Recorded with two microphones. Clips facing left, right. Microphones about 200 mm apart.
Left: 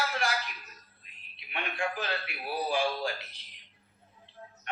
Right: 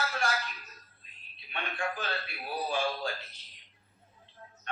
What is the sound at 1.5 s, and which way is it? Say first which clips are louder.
Speech: left 2 dB; 15° left (ahead or behind).